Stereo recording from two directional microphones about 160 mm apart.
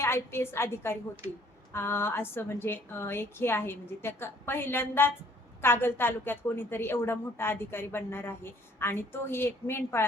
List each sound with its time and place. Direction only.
0.0 s a woman's voice: 15° left (ahead or behind)